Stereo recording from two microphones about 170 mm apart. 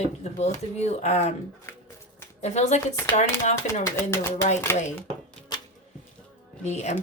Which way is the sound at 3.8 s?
15° left (ahead or behind).